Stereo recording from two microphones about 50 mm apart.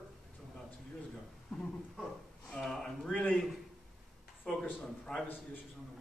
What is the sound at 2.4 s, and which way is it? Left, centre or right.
Speech, centre.